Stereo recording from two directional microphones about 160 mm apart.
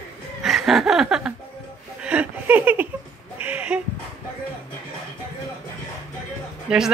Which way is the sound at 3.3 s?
10° right (ahead or behind).